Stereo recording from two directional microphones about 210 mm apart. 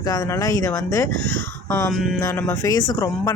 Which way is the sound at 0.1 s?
15° left (ahead or behind).